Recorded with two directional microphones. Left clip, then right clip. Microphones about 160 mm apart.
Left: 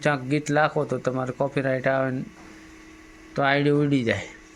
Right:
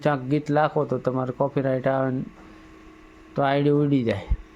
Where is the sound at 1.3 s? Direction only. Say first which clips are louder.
Right 1 dB; 10° right (ahead or behind).